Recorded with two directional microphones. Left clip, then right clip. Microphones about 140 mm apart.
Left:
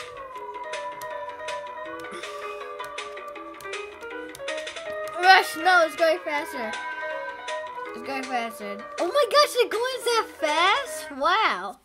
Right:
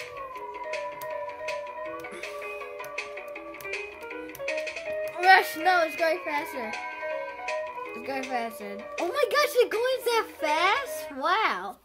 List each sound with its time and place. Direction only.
5.1 s a child's voice: 35° left (ahead or behind)
6.7 s music: 55° left (ahead or behind)
8.1 s a child's voice: 30° left (ahead or behind)